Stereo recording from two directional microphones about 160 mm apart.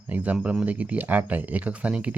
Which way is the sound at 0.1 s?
10° right (ahead or behind).